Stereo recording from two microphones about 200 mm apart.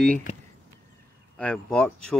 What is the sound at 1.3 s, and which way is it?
Speech, 5° left (ahead or behind).